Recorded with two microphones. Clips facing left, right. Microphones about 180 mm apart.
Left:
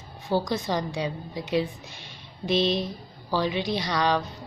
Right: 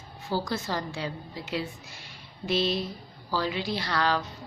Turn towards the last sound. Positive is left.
turn(degrees=20)  # may be behind; listen again after turning